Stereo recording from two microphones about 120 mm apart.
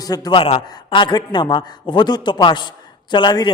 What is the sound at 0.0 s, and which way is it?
Speech, 30° left (ahead or behind).